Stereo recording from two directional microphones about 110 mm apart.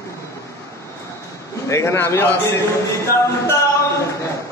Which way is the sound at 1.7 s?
25° left (ahead or behind).